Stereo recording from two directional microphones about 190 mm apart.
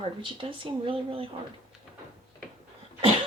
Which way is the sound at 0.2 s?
25° right (ahead or behind).